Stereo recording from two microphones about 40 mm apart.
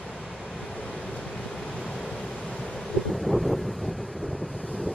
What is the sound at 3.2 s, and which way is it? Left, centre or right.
Wind noise, centre.